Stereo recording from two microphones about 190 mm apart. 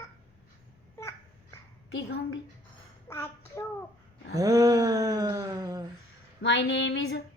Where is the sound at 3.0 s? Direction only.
15° left (ahead or behind).